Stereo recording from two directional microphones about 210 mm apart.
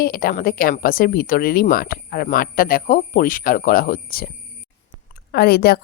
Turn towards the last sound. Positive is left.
turn(degrees=50)  # may be behind; listen again after turning